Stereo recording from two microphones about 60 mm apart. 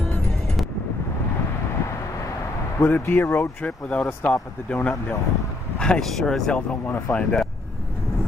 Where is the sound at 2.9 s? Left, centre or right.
Left.